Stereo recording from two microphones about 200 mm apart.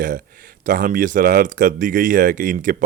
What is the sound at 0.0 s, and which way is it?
Speech, 45° right (ahead or behind).